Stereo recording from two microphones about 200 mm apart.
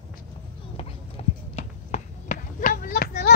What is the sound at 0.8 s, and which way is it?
Clip-clop, 30° left (ahead or behind).